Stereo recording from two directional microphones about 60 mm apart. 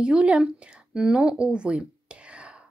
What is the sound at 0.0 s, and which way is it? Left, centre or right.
A woman's voice, centre.